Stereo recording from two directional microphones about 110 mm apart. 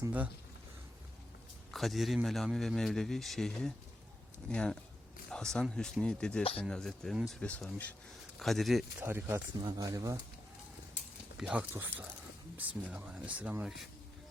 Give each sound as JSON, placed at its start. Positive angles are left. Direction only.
{"t": 1.7, "sound": "a man's voice", "side_deg": 0}
{"t": 9.0, "sound": "speech", "side_deg": -20}
{"t": 9.6, "sound": "speech", "side_deg": -30}
{"t": 11.3, "sound": "speech", "side_deg": -10}
{"t": 11.7, "sound": "speech", "side_deg": -20}